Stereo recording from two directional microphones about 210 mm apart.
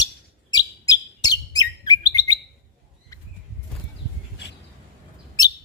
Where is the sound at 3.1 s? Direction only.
15° left (ahead or behind).